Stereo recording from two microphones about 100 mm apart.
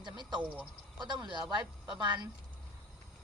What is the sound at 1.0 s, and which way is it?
Speech, 50° right (ahead or behind).